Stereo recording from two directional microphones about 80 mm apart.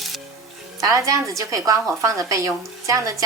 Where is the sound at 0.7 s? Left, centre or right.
Right.